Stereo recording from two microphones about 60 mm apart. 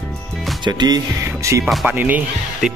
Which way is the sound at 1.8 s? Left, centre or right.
Right.